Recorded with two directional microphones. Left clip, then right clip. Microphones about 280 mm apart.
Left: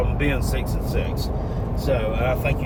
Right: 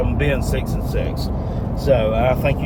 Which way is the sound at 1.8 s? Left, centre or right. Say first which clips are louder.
Right 7 dB; centre.